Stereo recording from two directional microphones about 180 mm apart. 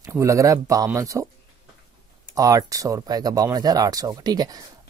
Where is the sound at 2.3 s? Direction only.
20° right (ahead or behind).